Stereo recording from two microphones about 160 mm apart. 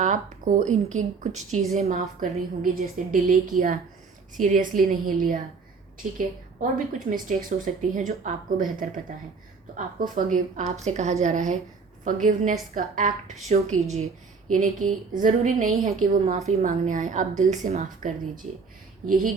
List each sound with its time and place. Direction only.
0.0 s a woman's voice: 55° right (ahead or behind)
2.2 s a woman's voice: 60° right (ahead or behind)
13.5 s a woman's voice: 45° right (ahead or behind)
14.5 s a woman's voice: 55° right (ahead or behind)